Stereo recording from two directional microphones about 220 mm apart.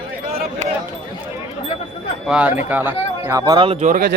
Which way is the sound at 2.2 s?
5° right (ahead or behind).